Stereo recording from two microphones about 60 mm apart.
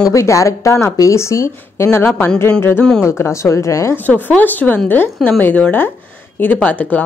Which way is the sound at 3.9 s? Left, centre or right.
Left.